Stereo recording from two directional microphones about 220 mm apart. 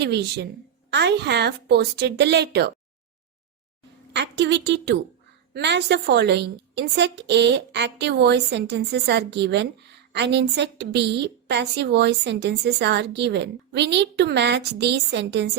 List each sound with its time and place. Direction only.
0.0 s a woman's voice: 50° right (ahead or behind)
4.1 s a woman's voice: 50° right (ahead or behind)